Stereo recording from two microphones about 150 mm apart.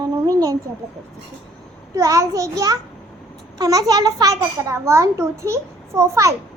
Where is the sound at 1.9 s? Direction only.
20° right (ahead or behind).